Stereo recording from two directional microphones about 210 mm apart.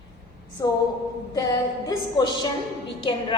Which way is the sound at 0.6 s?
15° left (ahead or behind).